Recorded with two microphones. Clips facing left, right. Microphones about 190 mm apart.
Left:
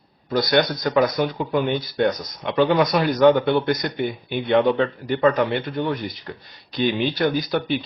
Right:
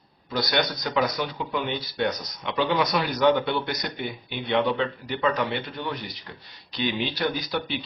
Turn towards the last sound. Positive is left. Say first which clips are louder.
# left 6 dB
turn(degrees=50)  # may be behind; listen again after turning